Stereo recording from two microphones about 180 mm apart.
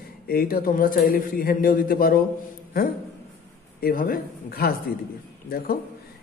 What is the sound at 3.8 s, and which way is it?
A man's voice, 55° left (ahead or behind).